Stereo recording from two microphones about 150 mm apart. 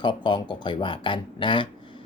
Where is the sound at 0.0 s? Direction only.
30° left (ahead or behind).